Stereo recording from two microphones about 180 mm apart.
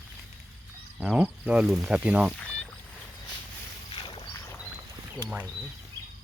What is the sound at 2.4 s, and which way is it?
Rowboat, 5° left (ahead or behind).